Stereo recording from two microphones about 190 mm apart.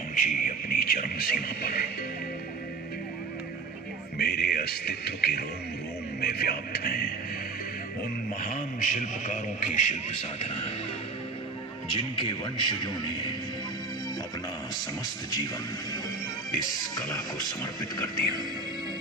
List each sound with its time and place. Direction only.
0.1 s music: 45° left (ahead or behind)
4.2 s music: 55° left (ahead or behind)
6.1 s speech: 55° left (ahead or behind)
8.4 s a man's voice: 45° left (ahead or behind)
12.1 s speech: 25° left (ahead or behind)
16.6 s speech: 20° left (ahead or behind)